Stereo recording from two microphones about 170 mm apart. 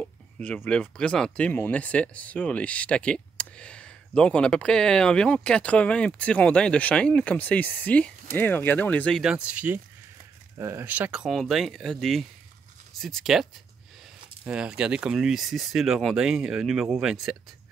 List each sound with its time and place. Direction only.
0.0 s a sound: 5° left (ahead or behind)
0.7 s speech: 5° left (ahead or behind)
9.2 s speech: 5° right (ahead or behind)